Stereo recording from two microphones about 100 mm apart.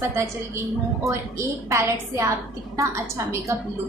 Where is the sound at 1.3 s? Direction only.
30° right (ahead or behind).